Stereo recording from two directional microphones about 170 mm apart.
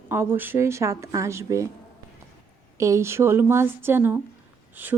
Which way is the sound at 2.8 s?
15° right (ahead or behind).